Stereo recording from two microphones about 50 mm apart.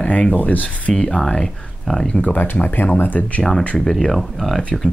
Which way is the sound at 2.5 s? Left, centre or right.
Left.